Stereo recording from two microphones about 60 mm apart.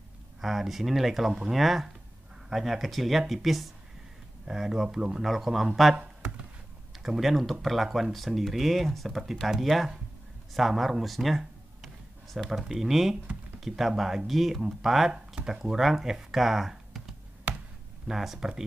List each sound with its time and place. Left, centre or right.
0.4 s speech: centre
5.2 s speech: centre
5.9 s a sound: right
7.0 s speech: centre
17.5 s a sound: right
18.0 s speech: centre